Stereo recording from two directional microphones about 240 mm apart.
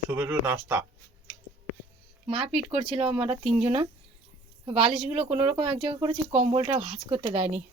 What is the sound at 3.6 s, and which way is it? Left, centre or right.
Speech, right.